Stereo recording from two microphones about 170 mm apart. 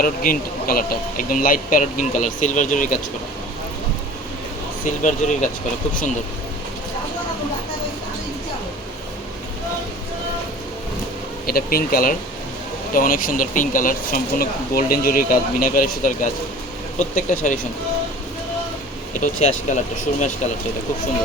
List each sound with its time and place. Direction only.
0.0 s speech: 55° left (ahead or behind)
5.0 s speech: 45° left (ahead or behind)
11.4 s speech: 60° left (ahead or behind)
19.2 s speech: 45° left (ahead or behind)